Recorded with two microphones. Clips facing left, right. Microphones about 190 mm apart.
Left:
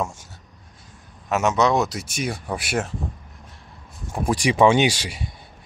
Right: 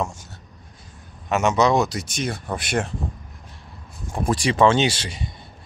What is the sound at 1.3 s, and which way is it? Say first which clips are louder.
Speech: right 1 dB; 5° left (ahead or behind).